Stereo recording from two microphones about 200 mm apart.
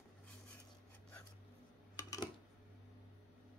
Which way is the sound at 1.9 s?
15° left (ahead or behind).